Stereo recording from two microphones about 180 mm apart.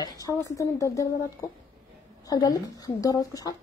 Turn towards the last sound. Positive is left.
turn(degrees=20)  # may be behind; listen again after turning